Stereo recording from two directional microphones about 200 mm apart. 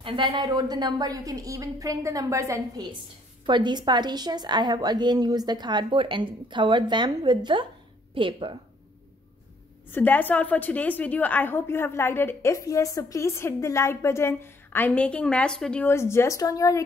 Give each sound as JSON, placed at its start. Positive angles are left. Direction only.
{"t": 0.0, "sound": "a woman's voice", "side_deg": -25}
{"t": 9.8, "sound": "a woman's voice", "side_deg": 10}